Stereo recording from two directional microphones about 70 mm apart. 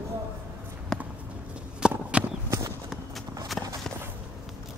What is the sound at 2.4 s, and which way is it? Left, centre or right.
Clip-clop, right.